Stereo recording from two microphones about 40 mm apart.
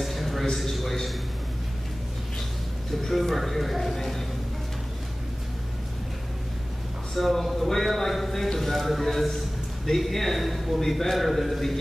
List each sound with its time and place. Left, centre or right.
0.0 s a sound: centre
3.0 s speech: centre
7.2 s speech: centre